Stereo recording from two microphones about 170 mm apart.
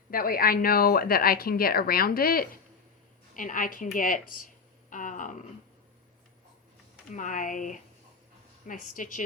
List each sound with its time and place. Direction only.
0.1 s speech: 60° left (ahead or behind)
7.1 s speech: 50° left (ahead or behind)